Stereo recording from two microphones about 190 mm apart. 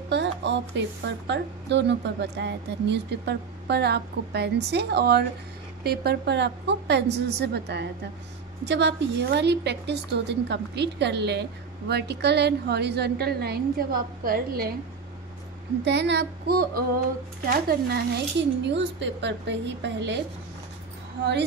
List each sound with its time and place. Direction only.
0.1 s speech: 70° right (ahead or behind); by 14.7 s 50° right (ahead or behind)
15.8 s a woman's voice: 65° right (ahead or behind)